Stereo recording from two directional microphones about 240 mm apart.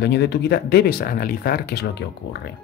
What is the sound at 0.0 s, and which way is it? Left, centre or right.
Speech, left.